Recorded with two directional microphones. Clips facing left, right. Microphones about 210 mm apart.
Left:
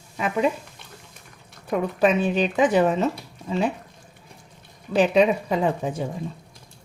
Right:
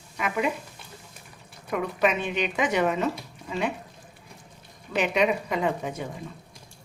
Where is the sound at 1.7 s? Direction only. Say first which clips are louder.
Left 5 dB; 35° left (ahead or behind).